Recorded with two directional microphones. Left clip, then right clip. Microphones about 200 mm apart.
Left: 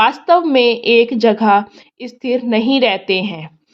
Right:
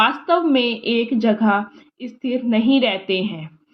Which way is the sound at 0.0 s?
30° left (ahead or behind).